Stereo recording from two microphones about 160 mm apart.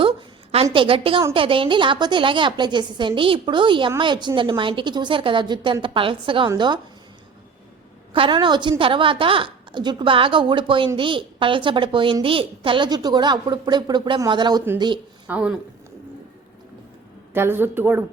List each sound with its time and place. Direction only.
0.0 s a sound: 35° right (ahead or behind)
1.3 s a woman's voice: 35° right (ahead or behind)
8.1 s a woman's voice: 30° right (ahead or behind)
15.3 s a woman's voice: 5° right (ahead or behind)
17.3 s a woman's voice: 15° right (ahead or behind)